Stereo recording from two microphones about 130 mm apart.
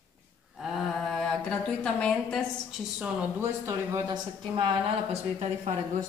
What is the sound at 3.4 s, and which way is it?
Speech, 20° right (ahead or behind).